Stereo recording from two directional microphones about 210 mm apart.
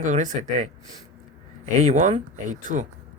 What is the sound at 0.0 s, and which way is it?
Speech, 35° right (ahead or behind).